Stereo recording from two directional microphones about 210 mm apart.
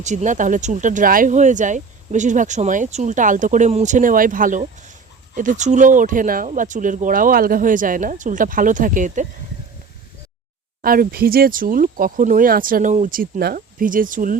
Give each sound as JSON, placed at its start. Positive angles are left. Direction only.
{"t": 0.0, "sound": "speech", "side_deg": -35}
{"t": 10.8, "sound": "speech", "side_deg": -45}